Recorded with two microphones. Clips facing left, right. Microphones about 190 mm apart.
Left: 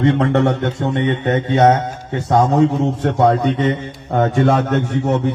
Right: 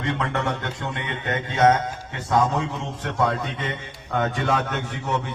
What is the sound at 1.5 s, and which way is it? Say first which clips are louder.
A man's voice: left 4 dB; 30° left (ahead or behind).